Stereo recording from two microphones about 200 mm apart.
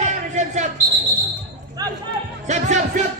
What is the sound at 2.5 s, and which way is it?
Music, 35° right (ahead or behind).